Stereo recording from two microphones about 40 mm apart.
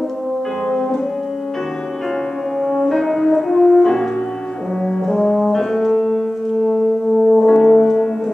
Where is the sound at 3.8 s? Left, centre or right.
Centre.